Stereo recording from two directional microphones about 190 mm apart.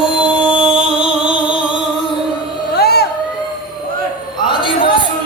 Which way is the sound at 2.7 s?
55° left (ahead or behind).